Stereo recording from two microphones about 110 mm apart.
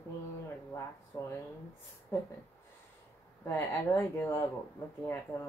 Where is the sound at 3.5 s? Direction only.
20° left (ahead or behind).